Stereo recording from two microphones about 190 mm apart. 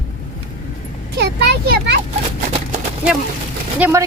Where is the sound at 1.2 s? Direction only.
60° right (ahead or behind).